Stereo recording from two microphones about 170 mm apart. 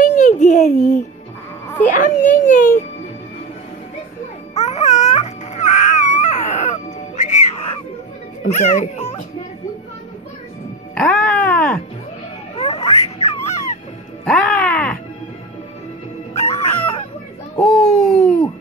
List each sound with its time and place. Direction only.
0.0 s a sound: 45° left (ahead or behind)
2.0 s a child's voice: 50° left (ahead or behind)
4.6 s baby cry: 40° left (ahead or behind)
8.5 s a child's voice: 45° left (ahead or behind)
11.0 s music: 5° left (ahead or behind)
12.5 s a sound: 35° left (ahead or behind)
14.2 s music: 5° left (ahead or behind)
16.3 s music: 40° left (ahead or behind)
17.6 s a sound: 5° left (ahead or behind)